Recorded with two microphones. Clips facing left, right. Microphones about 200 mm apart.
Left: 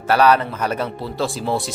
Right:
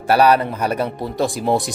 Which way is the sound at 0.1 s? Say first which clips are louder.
Right 1 dB; 10° right (ahead or behind).